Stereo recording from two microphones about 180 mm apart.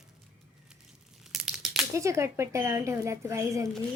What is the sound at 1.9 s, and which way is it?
Speech, 15° right (ahead or behind).